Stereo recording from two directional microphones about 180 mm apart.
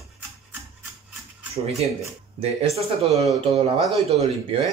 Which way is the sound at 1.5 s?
35° right (ahead or behind).